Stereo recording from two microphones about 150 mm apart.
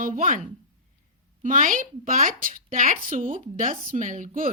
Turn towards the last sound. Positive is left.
turn(degrees=-65)  # may be behind; listen again after turning